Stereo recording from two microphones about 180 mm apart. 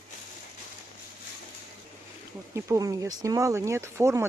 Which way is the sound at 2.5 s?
20° right (ahead or behind).